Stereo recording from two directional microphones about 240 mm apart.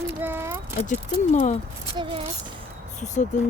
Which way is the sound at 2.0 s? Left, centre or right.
Right.